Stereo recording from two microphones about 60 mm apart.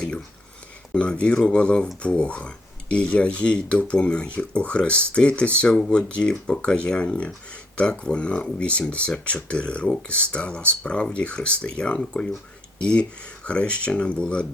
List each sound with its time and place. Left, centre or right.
0.9 s speech: centre